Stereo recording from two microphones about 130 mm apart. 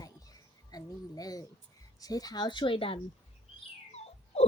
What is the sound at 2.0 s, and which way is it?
A woman's voice, 30° left (ahead or behind).